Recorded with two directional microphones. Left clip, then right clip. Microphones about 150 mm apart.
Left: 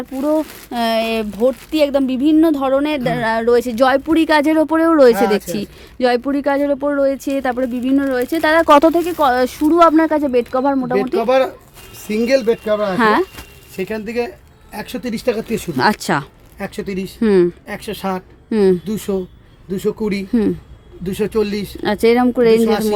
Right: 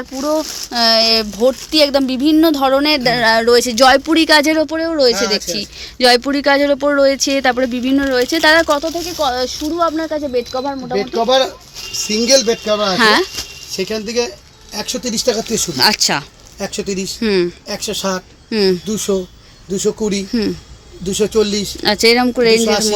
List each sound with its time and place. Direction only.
0.2 s speech: 20° left (ahead or behind)
4.7 s speech: 45° left (ahead or behind)
6.0 s speech: 10° left (ahead or behind)
8.7 s speech: 85° left
12.0 s a woman's voice: 15° left (ahead or behind)
15.8 s a woman's voice: 30° left (ahead or behind)
16.6 s speech: 15° left (ahead or behind)
17.2 s a woman's voice: 25° left (ahead or behind)
17.7 s a woman's voice: 15° left (ahead or behind)